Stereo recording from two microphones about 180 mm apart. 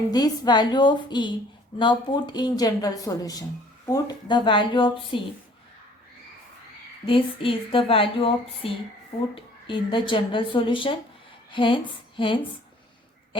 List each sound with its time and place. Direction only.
0.1 s speech: 25° left (ahead or behind)
7.0 s speech: 30° left (ahead or behind)